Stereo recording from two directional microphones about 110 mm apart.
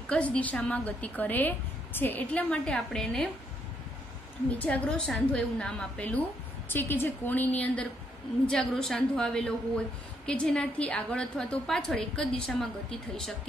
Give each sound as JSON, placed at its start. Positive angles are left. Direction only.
{"t": 0.1, "sound": "a woman's voice", "side_deg": 10}
{"t": 4.6, "sound": "a woman's voice", "side_deg": 15}